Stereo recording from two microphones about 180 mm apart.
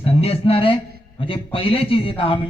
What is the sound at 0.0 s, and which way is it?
A man's voice, 35° left (ahead or behind).